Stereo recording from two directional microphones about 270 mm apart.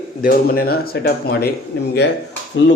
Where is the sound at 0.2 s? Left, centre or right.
Left.